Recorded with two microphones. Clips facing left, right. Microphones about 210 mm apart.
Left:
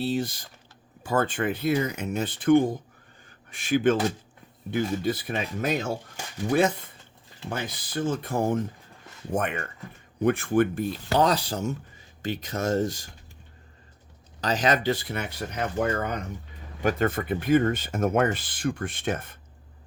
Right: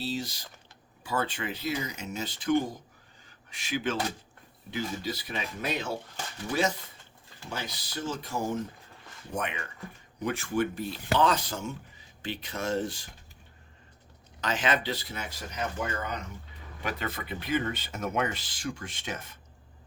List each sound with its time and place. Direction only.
0.0 s speech: 55° left (ahead or behind)
11.1 s speech: 40° left (ahead or behind)
14.4 s speech: 40° left (ahead or behind); by 19.4 s 55° left (ahead or behind)